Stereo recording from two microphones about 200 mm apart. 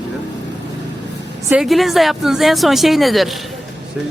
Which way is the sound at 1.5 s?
Centre (ahead or behind).